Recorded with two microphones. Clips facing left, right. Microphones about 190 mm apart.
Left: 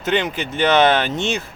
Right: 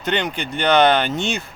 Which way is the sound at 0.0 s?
Centre (ahead or behind).